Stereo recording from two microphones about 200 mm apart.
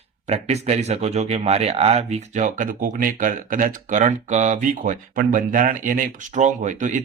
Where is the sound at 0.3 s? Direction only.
35° right (ahead or behind).